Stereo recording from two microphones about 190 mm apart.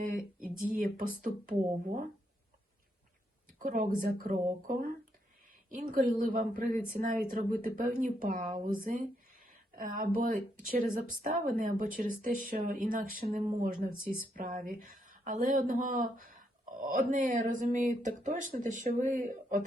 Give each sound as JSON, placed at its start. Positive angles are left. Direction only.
{"t": 0.1, "sound": "speech", "side_deg": -45}
{"t": 3.6, "sound": "speech", "side_deg": -45}